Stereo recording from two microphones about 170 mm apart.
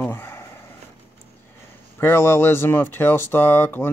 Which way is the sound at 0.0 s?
10° left (ahead or behind).